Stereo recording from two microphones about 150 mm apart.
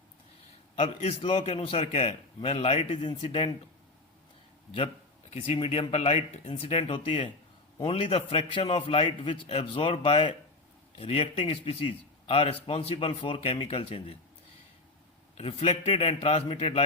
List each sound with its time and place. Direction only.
0.8 s a man's voice: 40° left (ahead or behind)
5.3 s a man's voice: 45° left (ahead or behind)
15.4 s a man's voice: 40° left (ahead or behind)